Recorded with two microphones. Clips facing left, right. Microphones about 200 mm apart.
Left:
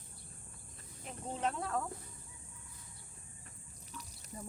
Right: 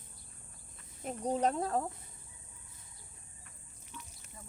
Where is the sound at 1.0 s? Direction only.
40° right (ahead or behind).